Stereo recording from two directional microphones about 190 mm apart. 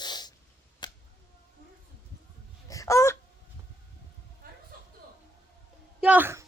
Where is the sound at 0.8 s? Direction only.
20° left (ahead or behind).